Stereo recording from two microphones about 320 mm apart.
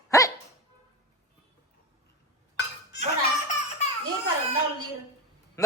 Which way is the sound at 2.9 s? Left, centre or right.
Left.